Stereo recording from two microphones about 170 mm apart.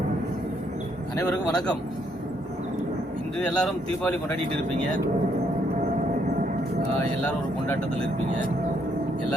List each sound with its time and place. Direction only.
3.4 s speech: 5° left (ahead or behind)